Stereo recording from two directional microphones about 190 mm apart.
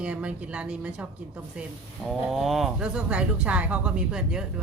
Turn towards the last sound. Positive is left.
turn(degrees=-5)  # may be behind; listen again after turning